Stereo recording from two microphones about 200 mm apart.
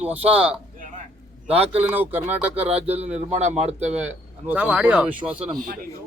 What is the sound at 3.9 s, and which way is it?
Speech, 10° right (ahead or behind).